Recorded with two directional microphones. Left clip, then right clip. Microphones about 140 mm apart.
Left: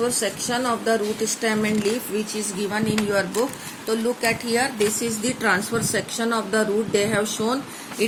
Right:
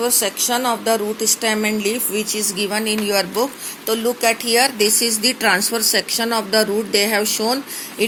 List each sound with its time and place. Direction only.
0.0 s speech: 35° right (ahead or behind)
3.8 s speech: 50° right (ahead or behind); by 8.0 s 35° right (ahead or behind)